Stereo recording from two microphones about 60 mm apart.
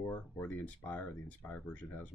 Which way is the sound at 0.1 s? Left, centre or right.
Left.